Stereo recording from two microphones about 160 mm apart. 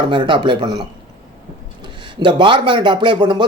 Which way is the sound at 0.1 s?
30° right (ahead or behind).